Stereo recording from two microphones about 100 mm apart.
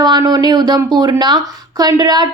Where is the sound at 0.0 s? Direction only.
45° right (ahead or behind).